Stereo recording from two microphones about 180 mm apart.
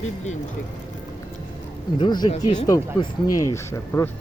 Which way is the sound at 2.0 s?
25° left (ahead or behind).